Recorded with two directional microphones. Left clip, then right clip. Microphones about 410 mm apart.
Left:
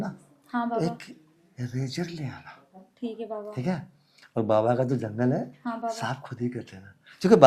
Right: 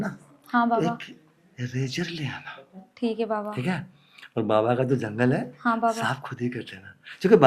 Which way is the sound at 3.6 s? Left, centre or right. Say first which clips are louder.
Right 2 dB; left.